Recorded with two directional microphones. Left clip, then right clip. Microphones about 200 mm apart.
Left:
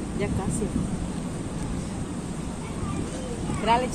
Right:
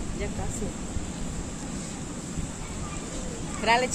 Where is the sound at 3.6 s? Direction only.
40° right (ahead or behind).